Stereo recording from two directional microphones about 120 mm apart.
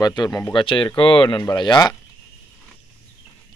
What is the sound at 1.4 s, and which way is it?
Speech, 35° left (ahead or behind).